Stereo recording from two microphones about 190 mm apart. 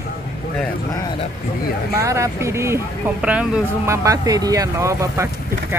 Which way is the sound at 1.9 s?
15° right (ahead or behind).